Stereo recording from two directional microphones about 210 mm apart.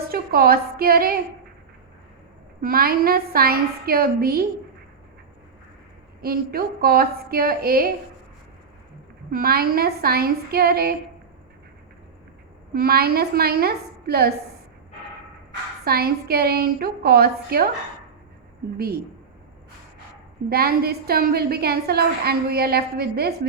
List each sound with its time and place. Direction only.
0.1 s a woman's voice: 45° right (ahead or behind)
2.6 s a woman's voice: 45° right (ahead or behind)
6.2 s a woman's voice: 45° right (ahead or behind)
9.3 s a woman's voice: 45° right (ahead or behind)
12.7 s a woman's voice: 45° right (ahead or behind)
15.8 s a woman's voice: 45° right (ahead or behind)
20.5 s a woman's voice: 45° right (ahead or behind)